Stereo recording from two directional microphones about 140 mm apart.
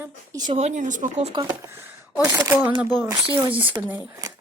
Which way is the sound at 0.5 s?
60° right (ahead or behind).